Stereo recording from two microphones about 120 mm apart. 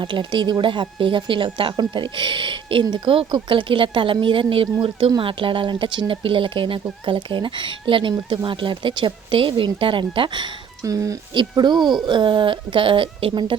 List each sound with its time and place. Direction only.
0.0 s speech: 40° right (ahead or behind)
10.8 s speech: 30° right (ahead or behind); by 13.6 s 45° right (ahead or behind)